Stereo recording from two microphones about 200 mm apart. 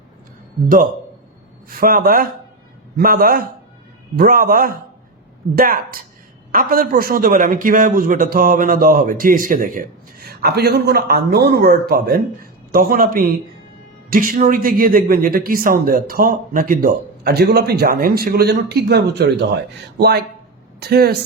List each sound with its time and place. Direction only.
1.7 s a man's voice: 45° right (ahead or behind)